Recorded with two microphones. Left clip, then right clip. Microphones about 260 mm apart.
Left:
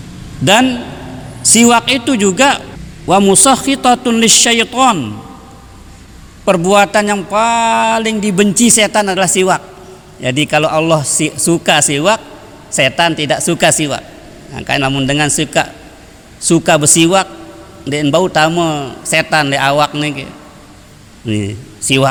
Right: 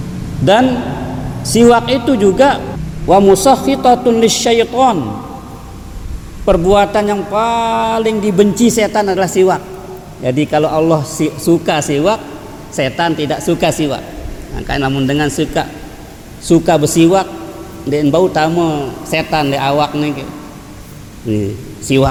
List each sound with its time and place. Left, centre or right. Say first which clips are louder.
1.4 s a man's voice: right 1 dB; left
6.4 s a man's voice: even; left
16.5 s speech: even; left
21.2 s speech: right 2 dB; left